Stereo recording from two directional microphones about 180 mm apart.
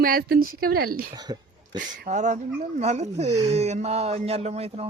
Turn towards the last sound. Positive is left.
turn(degrees=-35)  # may be behind; listen again after turning